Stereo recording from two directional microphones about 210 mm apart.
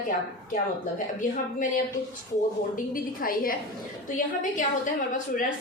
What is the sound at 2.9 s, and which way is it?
A woman's voice, 40° left (ahead or behind).